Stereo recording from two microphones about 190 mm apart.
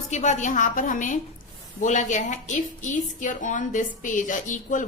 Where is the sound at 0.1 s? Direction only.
40° left (ahead or behind).